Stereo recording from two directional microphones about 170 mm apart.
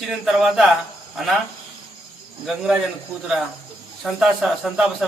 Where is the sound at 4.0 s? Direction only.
Centre (ahead or behind).